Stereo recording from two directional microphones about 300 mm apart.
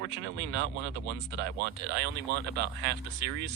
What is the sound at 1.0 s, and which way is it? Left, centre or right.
Speech, right.